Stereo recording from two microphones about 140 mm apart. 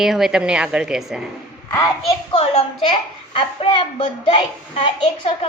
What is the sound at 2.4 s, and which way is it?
Speech, 55° left (ahead or behind).